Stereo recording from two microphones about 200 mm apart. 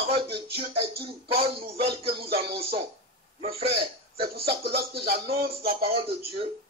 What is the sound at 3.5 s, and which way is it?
A man's voice, 30° right (ahead or behind).